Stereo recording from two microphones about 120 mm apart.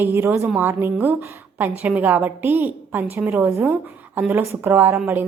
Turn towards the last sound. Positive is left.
turn(degrees=-15)  # may be behind; listen again after turning